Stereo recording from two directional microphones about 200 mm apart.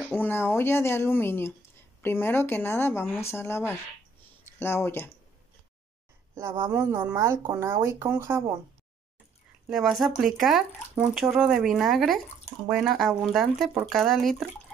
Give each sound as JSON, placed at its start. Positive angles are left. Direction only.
{"t": 0.1, "sound": "speech", "side_deg": 10}
{"t": 6.7, "sound": "speech", "side_deg": -10}
{"t": 9.7, "sound": "speech", "side_deg": 0}